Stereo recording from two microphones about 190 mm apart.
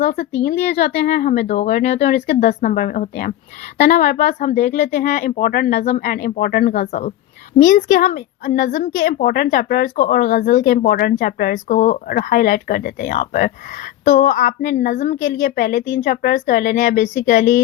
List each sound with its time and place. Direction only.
0.0 s a woman's voice: 45° left (ahead or behind)